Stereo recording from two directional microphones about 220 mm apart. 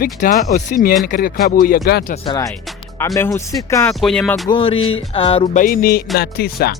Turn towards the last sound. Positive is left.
turn(degrees=45)  # may be behind; listen again after turning